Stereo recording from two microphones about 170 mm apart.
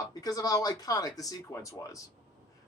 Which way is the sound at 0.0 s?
20° left (ahead or behind).